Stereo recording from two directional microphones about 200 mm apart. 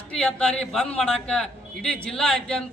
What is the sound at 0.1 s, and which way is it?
A man's voice, 5° left (ahead or behind).